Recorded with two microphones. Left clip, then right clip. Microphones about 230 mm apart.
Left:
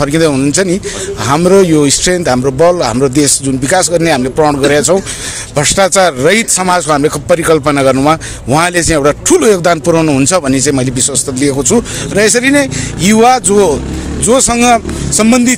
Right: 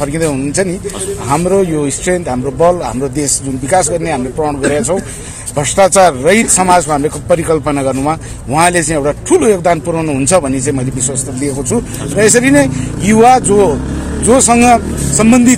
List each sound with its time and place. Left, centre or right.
0.0 s a man's voice: left